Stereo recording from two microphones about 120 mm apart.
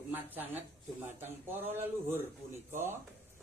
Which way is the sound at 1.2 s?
15° right (ahead or behind).